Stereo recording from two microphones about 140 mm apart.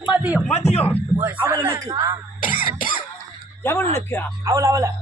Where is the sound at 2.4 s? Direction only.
85° left.